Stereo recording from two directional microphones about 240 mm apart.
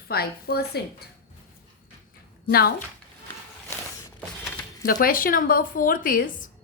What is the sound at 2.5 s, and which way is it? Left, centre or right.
Speech, left.